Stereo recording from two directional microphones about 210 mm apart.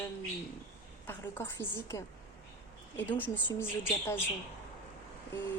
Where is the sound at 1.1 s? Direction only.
10° left (ahead or behind).